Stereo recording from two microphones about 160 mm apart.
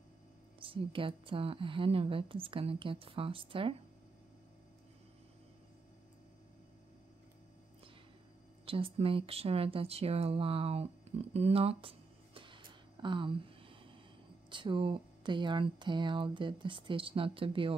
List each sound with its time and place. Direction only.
0.6 s speech: 35° right (ahead or behind)
8.6 s speech: 35° right (ahead or behind)